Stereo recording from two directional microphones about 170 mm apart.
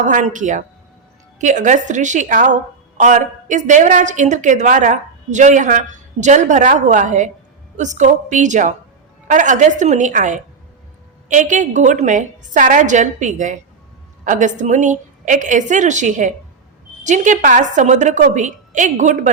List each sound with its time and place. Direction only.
0.0 s a woman's voice: 50° right (ahead or behind)